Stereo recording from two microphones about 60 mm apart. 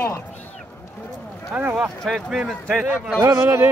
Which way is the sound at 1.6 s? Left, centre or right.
Centre.